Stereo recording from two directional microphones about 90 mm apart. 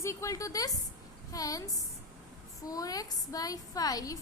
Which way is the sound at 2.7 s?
45° left (ahead or behind).